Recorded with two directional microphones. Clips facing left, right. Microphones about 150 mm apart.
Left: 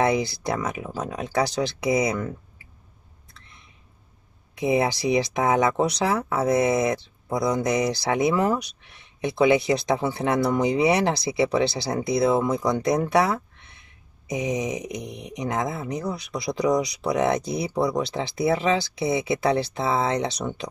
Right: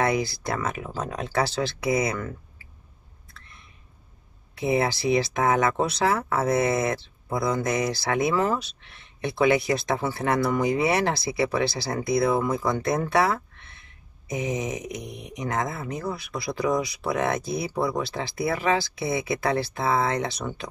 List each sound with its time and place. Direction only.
0.0 s speech: 20° left (ahead or behind)
3.3 s a sound: 20° left (ahead or behind)
4.6 s speech: 20° left (ahead or behind)